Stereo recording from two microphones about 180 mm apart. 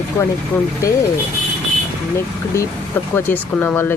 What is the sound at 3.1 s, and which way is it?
Speech, 10° left (ahead or behind).